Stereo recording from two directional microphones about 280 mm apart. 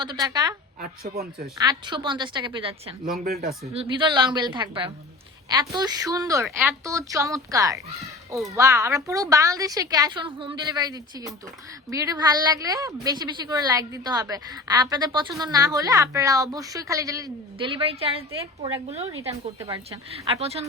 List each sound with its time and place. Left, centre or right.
0.0 s a woman's voice: centre
0.8 s speech: right
1.5 s a woman's voice: centre